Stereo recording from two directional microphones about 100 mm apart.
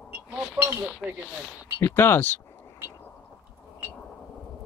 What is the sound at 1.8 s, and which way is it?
Speech, 25° left (ahead or behind).